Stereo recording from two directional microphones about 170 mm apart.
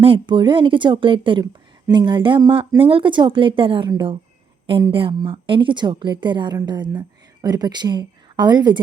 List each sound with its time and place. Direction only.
0.0 s speech: 30° right (ahead or behind)